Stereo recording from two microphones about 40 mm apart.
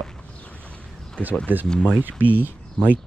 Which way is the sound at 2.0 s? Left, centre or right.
Right.